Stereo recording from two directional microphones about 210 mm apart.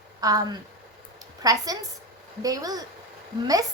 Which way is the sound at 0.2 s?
15° right (ahead or behind).